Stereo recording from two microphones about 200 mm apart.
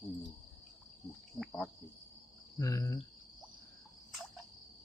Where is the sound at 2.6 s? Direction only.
15° left (ahead or behind).